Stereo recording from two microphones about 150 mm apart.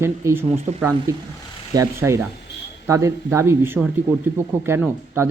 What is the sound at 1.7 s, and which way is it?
Speech, 20° right (ahead or behind).